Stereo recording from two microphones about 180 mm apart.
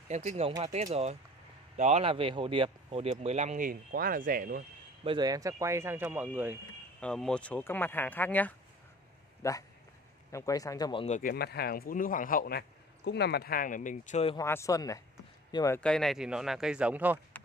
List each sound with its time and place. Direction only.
0.1 s speech: 40° right (ahead or behind)
1.8 s speech: 35° right (ahead or behind); by 4.6 s 55° right (ahead or behind)
5.0 s speech: 25° right (ahead or behind)
7.0 s speech: 5° left (ahead or behind); by 11.1 s 25° left (ahead or behind)
11.1 s a man's voice: 45° left (ahead or behind)
11.3 s a man's voice: 60° left (ahead or behind); by 14.3 s 40° left (ahead or behind)
14.3 s speech: 15° left (ahead or behind)
15.8 s speech: 5° left (ahead or behind)